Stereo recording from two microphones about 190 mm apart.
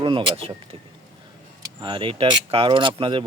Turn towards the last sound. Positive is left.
turn(degrees=-25)  # may be behind; listen again after turning